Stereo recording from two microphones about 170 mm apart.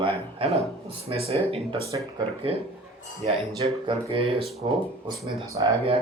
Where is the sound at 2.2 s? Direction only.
35° right (ahead or behind).